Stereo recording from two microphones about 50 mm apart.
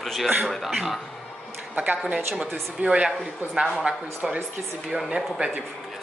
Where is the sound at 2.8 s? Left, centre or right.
Centre.